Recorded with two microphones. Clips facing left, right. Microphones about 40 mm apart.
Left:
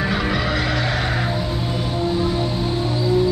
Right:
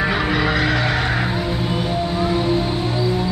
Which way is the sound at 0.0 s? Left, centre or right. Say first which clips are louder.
Right 3 dB; centre.